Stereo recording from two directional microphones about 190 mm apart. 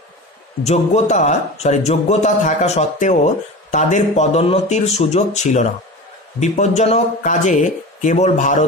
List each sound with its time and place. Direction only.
0.7 s speech: 35° left (ahead or behind)